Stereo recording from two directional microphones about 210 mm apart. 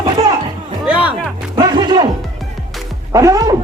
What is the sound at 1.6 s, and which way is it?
Music, 20° right (ahead or behind).